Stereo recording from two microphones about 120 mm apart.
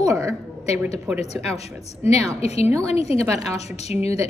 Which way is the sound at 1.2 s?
60° left (ahead or behind).